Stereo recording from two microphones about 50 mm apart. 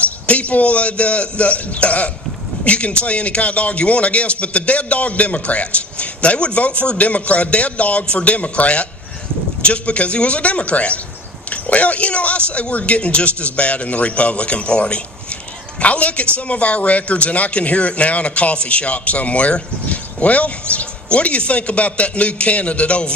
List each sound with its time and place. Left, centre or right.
0.0 s speech: left